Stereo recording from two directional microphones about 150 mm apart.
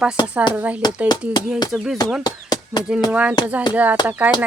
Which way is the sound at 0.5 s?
10° right (ahead or behind).